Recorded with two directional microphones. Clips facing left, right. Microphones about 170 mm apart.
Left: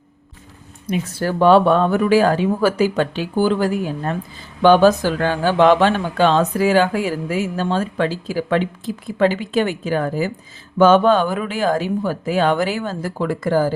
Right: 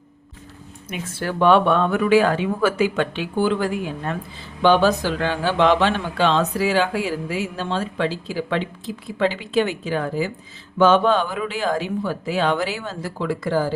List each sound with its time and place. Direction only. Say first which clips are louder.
0.9 s speech: left 6 dB; 40° left (ahead or behind)